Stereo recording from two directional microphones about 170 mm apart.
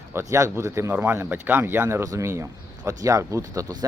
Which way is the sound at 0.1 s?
15° right (ahead or behind).